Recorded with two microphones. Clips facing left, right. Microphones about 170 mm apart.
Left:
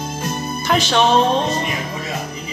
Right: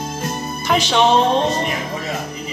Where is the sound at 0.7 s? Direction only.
15° right (ahead or behind).